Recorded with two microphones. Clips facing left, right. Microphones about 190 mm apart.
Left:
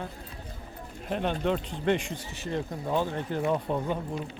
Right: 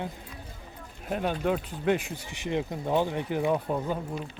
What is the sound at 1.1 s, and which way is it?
Speech, 5° right (ahead or behind).